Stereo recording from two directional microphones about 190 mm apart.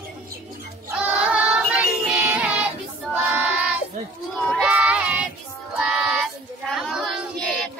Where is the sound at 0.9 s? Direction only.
5° right (ahead or behind).